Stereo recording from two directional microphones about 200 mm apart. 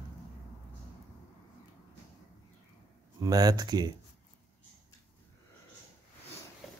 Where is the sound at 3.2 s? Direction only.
20° right (ahead or behind).